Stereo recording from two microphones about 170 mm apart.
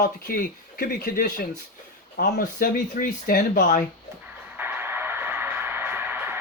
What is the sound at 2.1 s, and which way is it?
Speech, 90° left.